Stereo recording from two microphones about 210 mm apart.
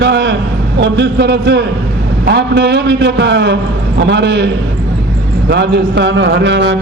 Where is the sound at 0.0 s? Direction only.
55° right (ahead or behind).